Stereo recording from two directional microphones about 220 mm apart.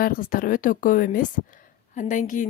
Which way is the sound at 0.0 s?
40° left (ahead or behind).